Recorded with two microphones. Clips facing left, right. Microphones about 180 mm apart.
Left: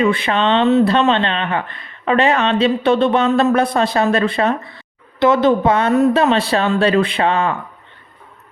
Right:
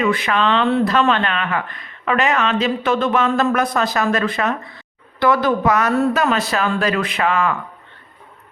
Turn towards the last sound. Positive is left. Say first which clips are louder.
# left 2 dB
turn(degrees=30)  # may be behind; listen again after turning